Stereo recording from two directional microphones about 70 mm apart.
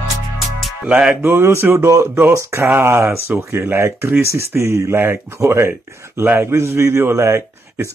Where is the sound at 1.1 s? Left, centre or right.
Right.